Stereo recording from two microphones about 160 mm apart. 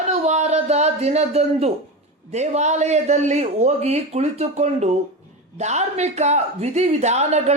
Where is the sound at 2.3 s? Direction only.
45° right (ahead or behind).